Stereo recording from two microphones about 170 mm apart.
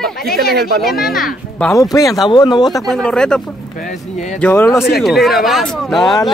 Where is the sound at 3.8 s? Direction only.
45° left (ahead or behind).